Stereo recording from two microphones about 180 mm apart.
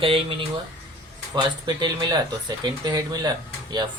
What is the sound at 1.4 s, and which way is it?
Speech, 25° right (ahead or behind).